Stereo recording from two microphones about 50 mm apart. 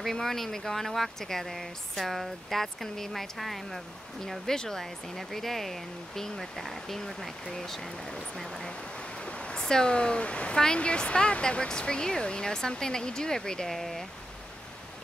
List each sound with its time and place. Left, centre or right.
0.0 s speech: centre
7.9 s speech: centre
8.9 s a sound: left
9.6 s speech: centre